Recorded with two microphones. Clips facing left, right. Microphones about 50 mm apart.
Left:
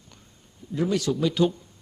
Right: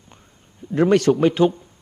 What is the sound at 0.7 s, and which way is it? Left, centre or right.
Speech, right.